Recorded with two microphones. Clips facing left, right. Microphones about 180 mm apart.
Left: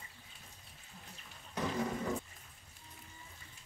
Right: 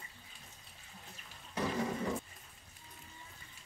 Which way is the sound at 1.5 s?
Centre (ahead or behind).